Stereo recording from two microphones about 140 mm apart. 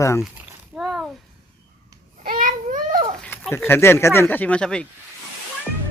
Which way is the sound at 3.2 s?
5° left (ahead or behind).